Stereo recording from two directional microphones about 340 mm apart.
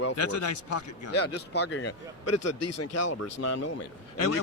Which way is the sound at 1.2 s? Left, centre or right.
Left.